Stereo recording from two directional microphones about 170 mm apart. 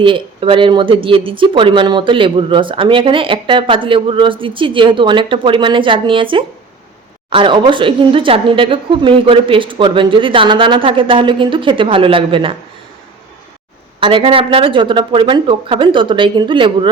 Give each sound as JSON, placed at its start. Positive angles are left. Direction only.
{"t": 0.0, "sound": "speech", "side_deg": -30}
{"t": 14.0, "sound": "speech", "side_deg": -30}